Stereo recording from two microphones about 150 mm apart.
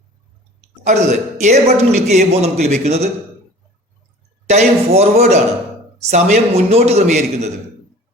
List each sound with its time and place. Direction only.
0.9 s a man's voice: 50° right (ahead or behind)
4.4 s a man's voice: 45° right (ahead or behind)